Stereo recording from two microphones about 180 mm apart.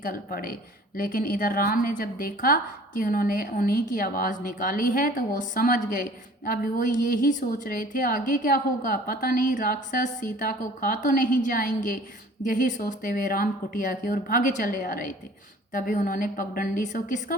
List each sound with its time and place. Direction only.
0.0 s a woman's voice: 55° left (ahead or behind)